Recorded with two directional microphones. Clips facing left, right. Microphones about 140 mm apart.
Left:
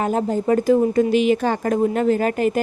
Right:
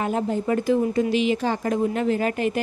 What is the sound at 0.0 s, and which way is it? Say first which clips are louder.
Speech: left 4 dB; 40° left (ahead or behind).